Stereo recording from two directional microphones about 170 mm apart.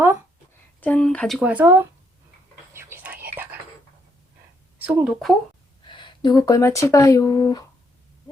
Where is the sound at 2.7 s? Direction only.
15° right (ahead or behind).